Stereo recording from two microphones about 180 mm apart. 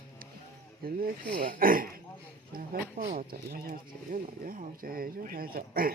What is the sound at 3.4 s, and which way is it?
Speech, 55° right (ahead or behind).